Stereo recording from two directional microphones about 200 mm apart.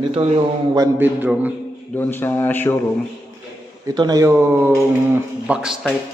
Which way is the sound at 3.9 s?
20° right (ahead or behind).